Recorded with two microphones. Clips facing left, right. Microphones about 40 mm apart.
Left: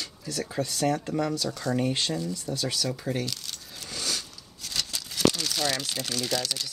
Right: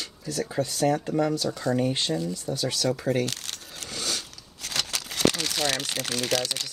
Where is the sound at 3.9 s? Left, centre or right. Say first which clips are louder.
Right 1 dB; right.